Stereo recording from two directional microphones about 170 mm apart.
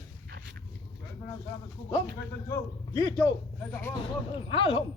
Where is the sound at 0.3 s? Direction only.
90° right.